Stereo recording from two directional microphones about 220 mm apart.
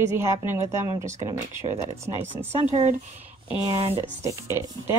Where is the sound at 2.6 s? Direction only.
30° right (ahead or behind).